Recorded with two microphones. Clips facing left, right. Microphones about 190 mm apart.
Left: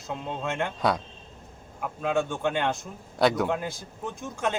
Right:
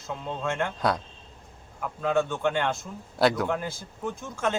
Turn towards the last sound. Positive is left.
turn(degrees=15)  # may be behind; listen again after turning